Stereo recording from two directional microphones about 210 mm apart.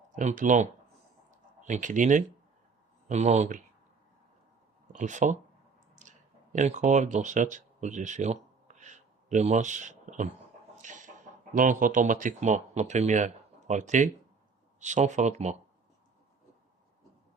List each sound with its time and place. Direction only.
0.2 s speech: 35° right (ahead or behind)
4.9 s speech: 35° right (ahead or behind)
6.0 s clicking: 35° right (ahead or behind)
6.9 s speech: 35° right (ahead or behind)
10.8 s a sound: 35° right (ahead or behind)
11.5 s speech: 40° right (ahead or behind)